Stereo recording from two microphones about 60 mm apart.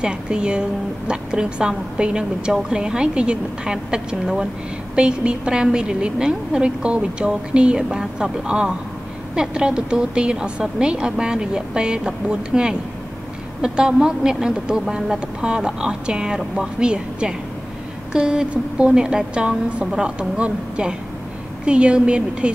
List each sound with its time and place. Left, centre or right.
0.0 s a woman's voice: centre